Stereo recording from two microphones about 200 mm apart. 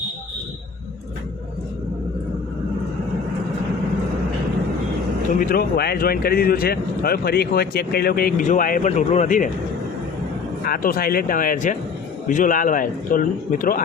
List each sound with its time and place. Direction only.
5.3 s speech: 45° left (ahead or behind)
10.6 s speech: 50° left (ahead or behind)